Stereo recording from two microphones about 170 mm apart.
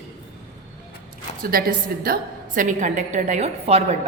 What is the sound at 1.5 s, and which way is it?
A woman's voice, 60° right (ahead or behind).